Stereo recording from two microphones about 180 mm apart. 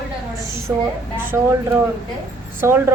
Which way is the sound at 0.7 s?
10° right (ahead or behind).